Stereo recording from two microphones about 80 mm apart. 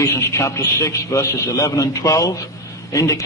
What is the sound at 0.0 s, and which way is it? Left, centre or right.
A man's voice, left.